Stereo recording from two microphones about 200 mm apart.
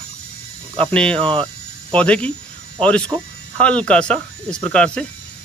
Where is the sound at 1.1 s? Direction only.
25° right (ahead or behind).